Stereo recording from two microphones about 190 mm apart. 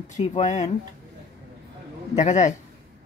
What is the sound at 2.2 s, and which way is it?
Speech, 40° left (ahead or behind).